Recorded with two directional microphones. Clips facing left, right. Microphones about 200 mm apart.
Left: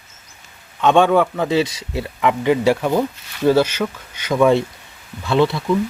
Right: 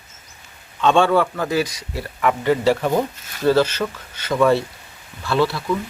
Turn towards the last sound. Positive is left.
turn(degrees=20)  # may be behind; listen again after turning